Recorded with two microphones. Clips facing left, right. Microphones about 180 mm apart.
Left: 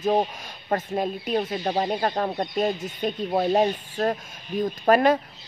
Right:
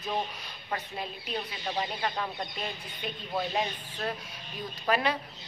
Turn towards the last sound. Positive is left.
turn(degrees=50)  # may be behind; listen again after turning